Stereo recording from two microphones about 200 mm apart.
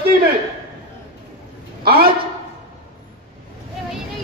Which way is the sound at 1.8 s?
50° right (ahead or behind).